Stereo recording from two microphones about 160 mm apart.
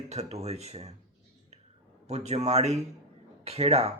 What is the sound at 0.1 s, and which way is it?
Speech, 40° right (ahead or behind).